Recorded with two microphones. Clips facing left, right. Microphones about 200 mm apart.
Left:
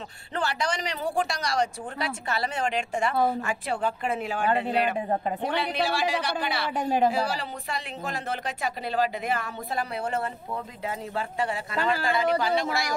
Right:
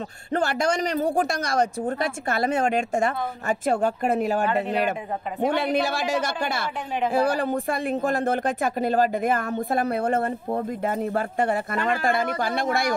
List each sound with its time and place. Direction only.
0.3 s speech: 50° right (ahead or behind)